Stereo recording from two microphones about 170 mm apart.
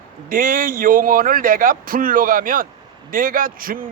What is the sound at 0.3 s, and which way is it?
A man's voice, 55° right (ahead or behind).